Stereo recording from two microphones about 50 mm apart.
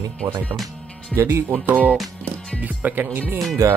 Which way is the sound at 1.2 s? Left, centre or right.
Right.